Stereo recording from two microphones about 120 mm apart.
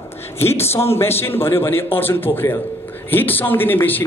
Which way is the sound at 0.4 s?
20° left (ahead or behind).